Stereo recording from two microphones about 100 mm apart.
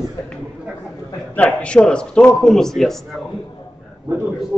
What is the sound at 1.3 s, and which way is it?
A man's voice, 15° left (ahead or behind).